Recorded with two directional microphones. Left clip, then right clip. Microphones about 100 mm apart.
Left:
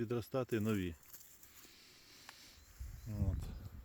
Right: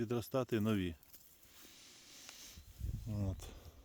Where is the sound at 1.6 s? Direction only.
55° right (ahead or behind).